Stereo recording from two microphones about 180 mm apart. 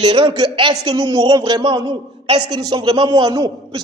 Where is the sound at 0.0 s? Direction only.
30° right (ahead or behind).